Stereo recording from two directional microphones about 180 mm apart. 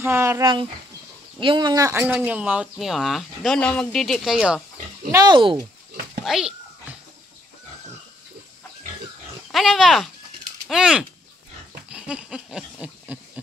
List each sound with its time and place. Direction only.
0.0 s speech: 15° right (ahead or behind)
1.4 s speech: 25° right (ahead or behind); by 4.6 s 5° right (ahead or behind)
5.1 s speech: 25° right (ahead or behind)
6.2 s a child's voice: 5° right (ahead or behind)
9.5 s speech: centre (ahead or behind)
11.9 s goat: 5° right (ahead or behind)